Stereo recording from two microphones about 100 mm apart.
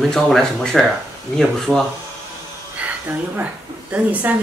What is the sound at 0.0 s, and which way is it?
Speech, 5° left (ahead or behind).